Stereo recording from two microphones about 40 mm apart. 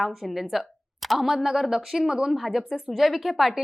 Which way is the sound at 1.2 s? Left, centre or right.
Centre.